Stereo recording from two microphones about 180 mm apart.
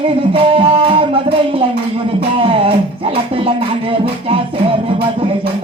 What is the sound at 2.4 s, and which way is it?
Music, 30° right (ahead or behind).